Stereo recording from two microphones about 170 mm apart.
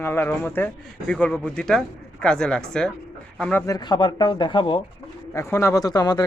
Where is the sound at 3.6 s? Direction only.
25° left (ahead or behind).